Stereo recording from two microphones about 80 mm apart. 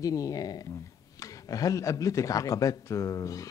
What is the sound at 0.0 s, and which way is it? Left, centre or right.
Speech, left.